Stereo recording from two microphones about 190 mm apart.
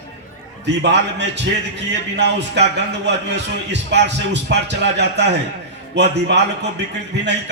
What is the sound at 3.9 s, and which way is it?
A man's voice, 65° right (ahead or behind).